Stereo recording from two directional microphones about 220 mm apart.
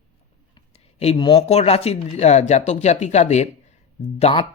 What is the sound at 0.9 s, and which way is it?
Speech, 25° left (ahead or behind).